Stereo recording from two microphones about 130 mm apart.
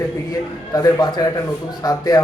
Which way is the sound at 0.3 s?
30° left (ahead or behind).